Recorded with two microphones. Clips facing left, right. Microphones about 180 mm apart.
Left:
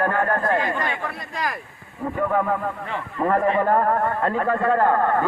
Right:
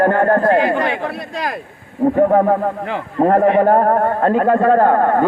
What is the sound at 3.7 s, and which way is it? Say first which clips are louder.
Speech: right 6 dB; 45° right (ahead or behind).